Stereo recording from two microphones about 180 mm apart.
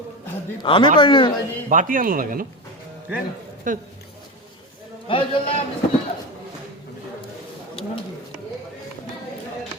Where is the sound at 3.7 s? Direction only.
45° right (ahead or behind).